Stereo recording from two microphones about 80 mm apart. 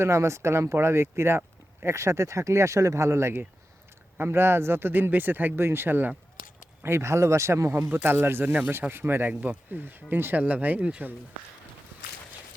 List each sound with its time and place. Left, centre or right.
0.0 s speech: right; by 11.1 s centre